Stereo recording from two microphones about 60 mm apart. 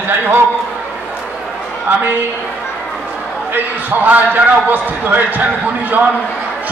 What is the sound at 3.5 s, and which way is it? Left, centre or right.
Speech, right.